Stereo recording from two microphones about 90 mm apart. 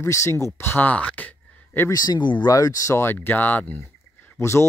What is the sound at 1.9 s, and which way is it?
Speech, 45° left (ahead or behind).